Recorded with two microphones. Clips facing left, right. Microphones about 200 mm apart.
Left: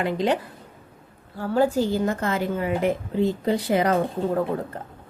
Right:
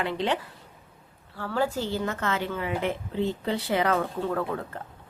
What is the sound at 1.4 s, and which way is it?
Speech, 40° left (ahead or behind).